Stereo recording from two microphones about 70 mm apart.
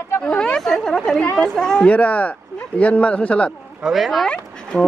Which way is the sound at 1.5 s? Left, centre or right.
Centre.